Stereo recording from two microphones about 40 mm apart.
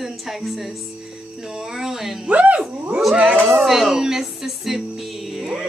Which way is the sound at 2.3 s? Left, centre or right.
Right.